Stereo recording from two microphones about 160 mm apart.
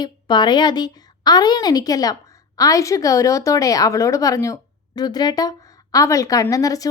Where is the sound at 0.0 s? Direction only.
25° left (ahead or behind).